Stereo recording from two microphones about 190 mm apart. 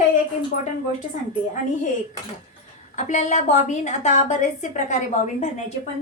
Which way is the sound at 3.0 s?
40° left (ahead or behind).